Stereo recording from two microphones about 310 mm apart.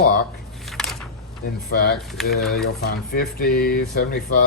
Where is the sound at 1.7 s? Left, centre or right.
Left.